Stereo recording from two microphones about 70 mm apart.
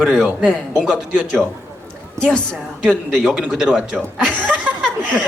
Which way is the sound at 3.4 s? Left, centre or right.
Centre.